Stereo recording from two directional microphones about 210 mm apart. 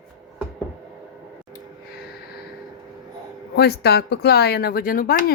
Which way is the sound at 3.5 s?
50° left (ahead or behind).